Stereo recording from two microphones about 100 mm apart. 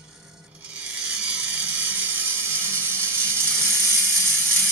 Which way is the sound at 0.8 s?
10° right (ahead or behind).